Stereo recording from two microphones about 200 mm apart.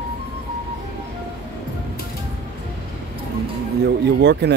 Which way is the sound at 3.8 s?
60° right (ahead or behind).